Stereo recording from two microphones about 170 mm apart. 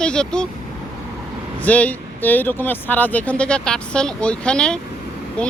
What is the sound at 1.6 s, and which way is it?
Speech, 10° left (ahead or behind).